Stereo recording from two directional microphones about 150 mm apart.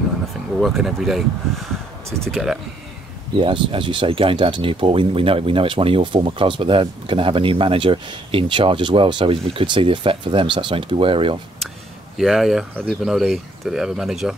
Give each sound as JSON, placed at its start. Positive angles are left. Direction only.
{"t": 0.6, "sound": "speech", "side_deg": 0}
{"t": 3.3, "sound": "speech", "side_deg": -35}
{"t": 12.2, "sound": "speech", "side_deg": 0}